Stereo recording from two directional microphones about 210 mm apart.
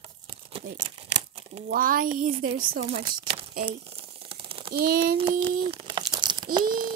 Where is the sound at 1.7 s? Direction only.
40° right (ahead or behind).